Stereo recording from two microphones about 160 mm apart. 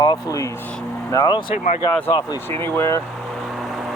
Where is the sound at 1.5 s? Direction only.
45° left (ahead or behind).